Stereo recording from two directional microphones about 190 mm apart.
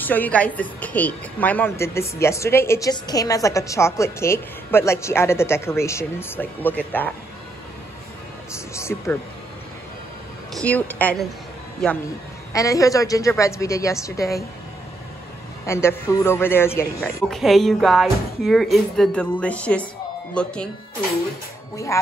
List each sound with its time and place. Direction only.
0.0 s a woman's voice: 10° left (ahead or behind)
8.7 s a woman's voice: 15° left (ahead or behind)
10.5 s a woman's voice: 5° left (ahead or behind)
12.5 s a woman's voice: 15° left (ahead or behind)
15.6 s a woman's voice: 15° left (ahead or behind)
17.3 s speech: centre (ahead or behind)